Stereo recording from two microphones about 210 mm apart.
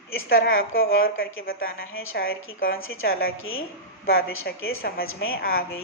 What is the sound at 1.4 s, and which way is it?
Speech, 45° left (ahead or behind).